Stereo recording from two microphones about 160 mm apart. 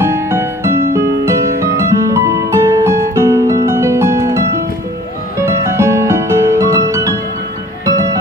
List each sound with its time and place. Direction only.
0.0 s music: 15° right (ahead or behind)